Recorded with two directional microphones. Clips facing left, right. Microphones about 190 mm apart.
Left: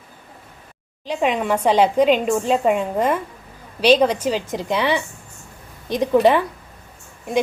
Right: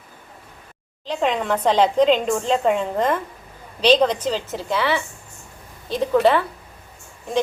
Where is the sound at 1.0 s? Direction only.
10° left (ahead or behind).